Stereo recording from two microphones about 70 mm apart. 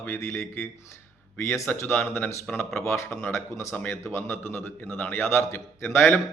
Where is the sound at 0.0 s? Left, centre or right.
Left.